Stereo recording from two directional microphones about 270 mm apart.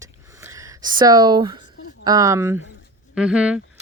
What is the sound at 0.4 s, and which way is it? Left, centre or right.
Speech, centre.